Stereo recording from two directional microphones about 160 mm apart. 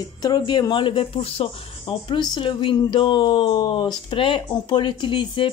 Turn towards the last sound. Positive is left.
turn(degrees=30)  # may be behind; listen again after turning